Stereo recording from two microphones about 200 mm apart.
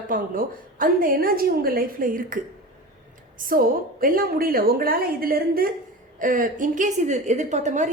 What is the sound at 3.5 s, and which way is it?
A woman's voice, 45° right (ahead or behind).